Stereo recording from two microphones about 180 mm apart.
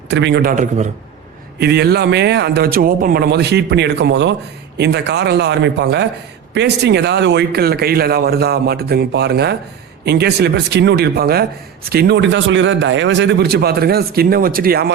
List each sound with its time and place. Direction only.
0.1 s speech: 75° right (ahead or behind)
0.5 s a man's voice: 45° right (ahead or behind)
1.5 s speech: 65° right (ahead or behind)